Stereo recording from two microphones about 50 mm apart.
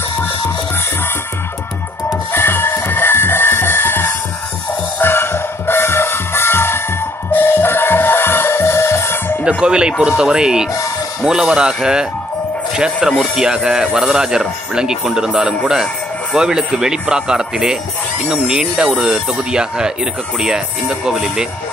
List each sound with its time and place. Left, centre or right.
2.3 s music: left
9.4 s speech: centre